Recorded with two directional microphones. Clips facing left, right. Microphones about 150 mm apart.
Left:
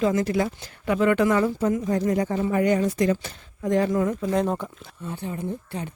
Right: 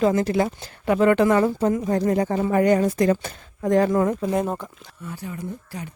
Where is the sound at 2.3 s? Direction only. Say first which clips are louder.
Right 5 dB; 50° right (ahead or behind).